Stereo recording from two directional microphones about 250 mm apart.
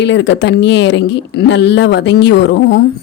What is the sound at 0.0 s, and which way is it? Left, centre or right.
A woman's voice, left.